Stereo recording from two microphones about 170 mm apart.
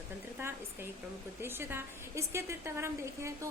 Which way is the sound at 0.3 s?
15° right (ahead or behind).